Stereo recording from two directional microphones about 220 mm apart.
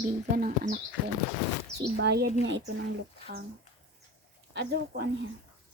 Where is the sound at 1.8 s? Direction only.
50° right (ahead or behind).